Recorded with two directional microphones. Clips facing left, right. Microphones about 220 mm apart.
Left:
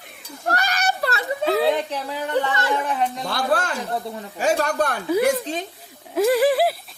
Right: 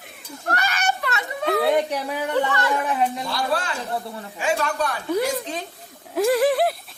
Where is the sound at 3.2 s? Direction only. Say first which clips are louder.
Left 2 dB; 50° left (ahead or behind).